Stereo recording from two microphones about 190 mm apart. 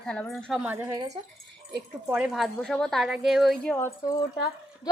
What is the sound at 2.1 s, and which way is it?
A woman's voice, 5° right (ahead or behind).